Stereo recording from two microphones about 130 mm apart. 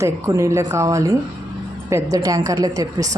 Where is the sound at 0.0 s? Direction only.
25° right (ahead or behind).